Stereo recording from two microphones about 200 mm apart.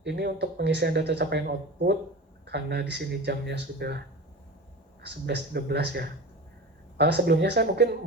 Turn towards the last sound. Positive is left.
turn(degrees=-55)  # may be behind; listen again after turning